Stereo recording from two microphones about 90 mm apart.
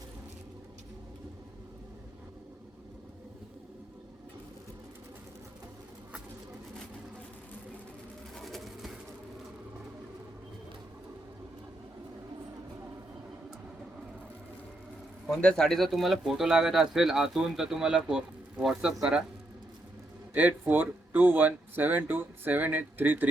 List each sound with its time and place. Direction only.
8.4 s pigeon: centre (ahead or behind)
15.4 s speech: 10° left (ahead or behind); by 19.2 s 10° right (ahead or behind)
20.3 s speech: 20° right (ahead or behind)